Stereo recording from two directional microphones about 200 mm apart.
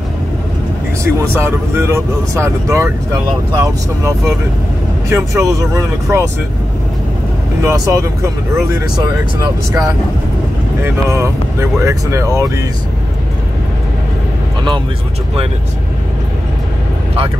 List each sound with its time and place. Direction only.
1.0 s speech: 10° right (ahead or behind)
5.1 s speech: 15° right (ahead or behind)
7.6 s speech: 15° right (ahead or behind)